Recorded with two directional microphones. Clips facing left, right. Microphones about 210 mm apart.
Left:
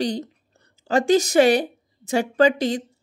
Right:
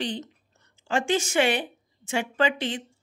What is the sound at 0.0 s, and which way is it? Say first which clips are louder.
A woman's voice: left 7 dB; 40° left (ahead or behind).